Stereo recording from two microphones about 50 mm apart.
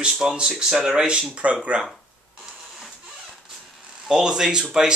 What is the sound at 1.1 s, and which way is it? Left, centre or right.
Speech, right.